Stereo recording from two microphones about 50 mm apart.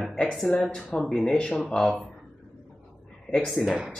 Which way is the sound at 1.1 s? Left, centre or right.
Centre.